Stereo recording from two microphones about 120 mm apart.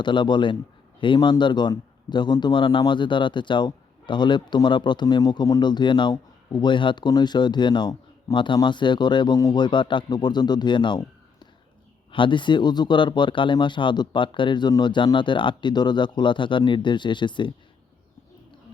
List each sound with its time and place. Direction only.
0.0 s a man's voice: 40° left (ahead or behind)
12.1 s a man's voice: 40° left (ahead or behind)